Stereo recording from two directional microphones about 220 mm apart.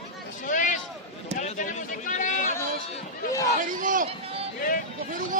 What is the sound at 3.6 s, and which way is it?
Speech, 35° right (ahead or behind).